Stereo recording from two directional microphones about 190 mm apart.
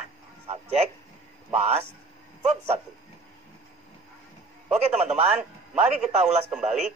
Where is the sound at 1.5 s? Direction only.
35° right (ahead or behind).